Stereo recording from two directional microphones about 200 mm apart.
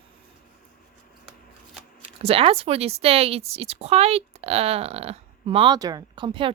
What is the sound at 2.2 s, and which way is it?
A woman's voice, 30° right (ahead or behind).